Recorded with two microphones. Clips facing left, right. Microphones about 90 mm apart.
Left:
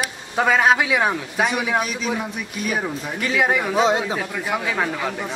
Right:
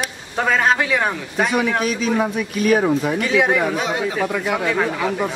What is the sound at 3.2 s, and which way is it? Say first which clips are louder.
Speech: even; centre (ahead or behind).